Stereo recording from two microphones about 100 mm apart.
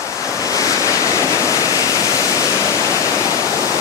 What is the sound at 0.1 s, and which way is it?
Waves, 30° left (ahead or behind).